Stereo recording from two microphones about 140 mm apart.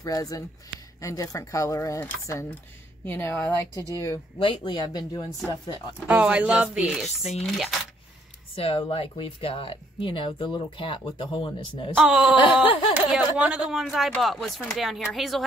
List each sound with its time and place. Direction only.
0.0 s speech: 25° left (ahead or behind)
3.1 s speech: 15° left (ahead or behind)
4.4 s speech: 35° left (ahead or behind)
6.0 s speech: 10° right (ahead or behind)
7.4 s a sound: centre (ahead or behind)
8.5 s speech: 40° left (ahead or behind)
12.0 s a sound: 5° right (ahead or behind)